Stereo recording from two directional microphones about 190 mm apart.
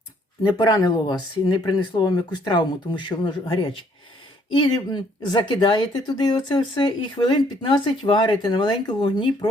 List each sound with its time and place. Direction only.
0.5 s speech: 20° left (ahead or behind)
4.5 s speech: 25° left (ahead or behind)